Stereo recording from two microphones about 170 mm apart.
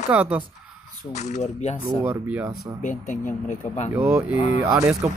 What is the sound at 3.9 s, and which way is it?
Speech, 10° right (ahead or behind).